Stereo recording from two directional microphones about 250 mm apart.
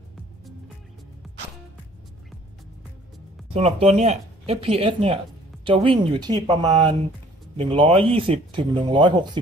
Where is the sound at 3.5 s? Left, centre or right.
Right.